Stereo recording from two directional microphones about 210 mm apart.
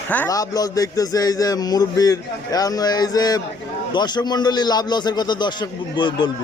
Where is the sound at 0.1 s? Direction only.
10° left (ahead or behind).